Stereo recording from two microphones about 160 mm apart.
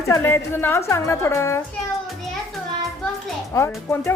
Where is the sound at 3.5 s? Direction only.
15° left (ahead or behind).